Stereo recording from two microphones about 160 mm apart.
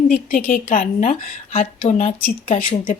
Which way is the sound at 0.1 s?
60° left (ahead or behind).